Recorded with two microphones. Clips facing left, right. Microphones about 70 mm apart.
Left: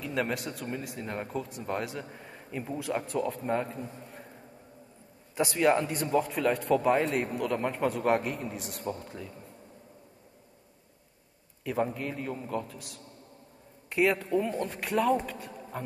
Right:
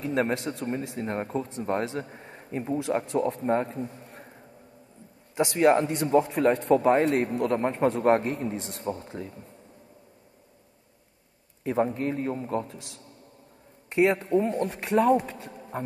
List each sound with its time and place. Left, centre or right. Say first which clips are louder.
0.0 s a man's voice: right 5 dB; right
5.3 s a man's voice: right 4 dB; right
11.6 s a man's voice: right 5 dB; right
14.4 s a man's voice: right 4 dB; right